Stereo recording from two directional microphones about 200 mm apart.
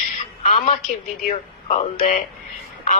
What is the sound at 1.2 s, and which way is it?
Speech, 35° left (ahead or behind).